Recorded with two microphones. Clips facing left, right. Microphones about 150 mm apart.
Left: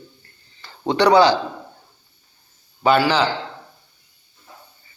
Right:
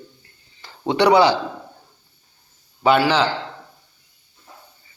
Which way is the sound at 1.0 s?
20° right (ahead or behind).